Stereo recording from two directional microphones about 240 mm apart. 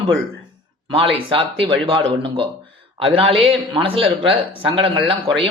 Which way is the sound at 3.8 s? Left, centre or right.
Right.